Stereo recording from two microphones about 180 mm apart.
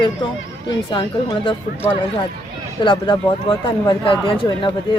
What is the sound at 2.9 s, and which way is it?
Speech, 30° left (ahead or behind).